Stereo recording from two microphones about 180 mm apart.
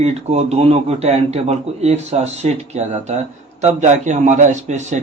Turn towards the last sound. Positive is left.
turn(degrees=-40)  # may be behind; listen again after turning